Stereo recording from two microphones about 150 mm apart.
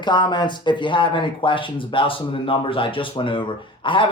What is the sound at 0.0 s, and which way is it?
A man's voice, 30° left (ahead or behind).